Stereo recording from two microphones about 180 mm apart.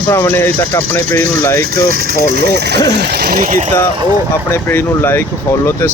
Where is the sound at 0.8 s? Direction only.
90° right.